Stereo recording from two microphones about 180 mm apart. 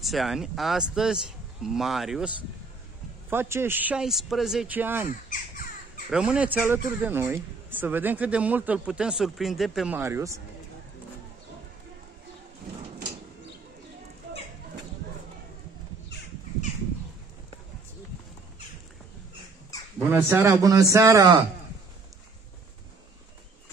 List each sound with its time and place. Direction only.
0.0 s speech: centre (ahead or behind)
3.3 s speech: 15° right (ahead or behind)
9.9 s speech: 15° right (ahead or behind)
20.1 s speech: 15° right (ahead or behind)